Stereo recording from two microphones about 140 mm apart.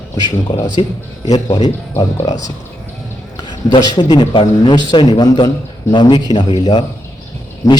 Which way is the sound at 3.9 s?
35° left (ahead or behind).